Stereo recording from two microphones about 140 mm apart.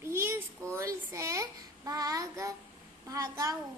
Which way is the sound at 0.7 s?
20° right (ahead or behind).